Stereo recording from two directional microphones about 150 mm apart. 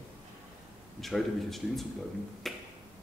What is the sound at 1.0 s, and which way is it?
Speech, centre (ahead or behind).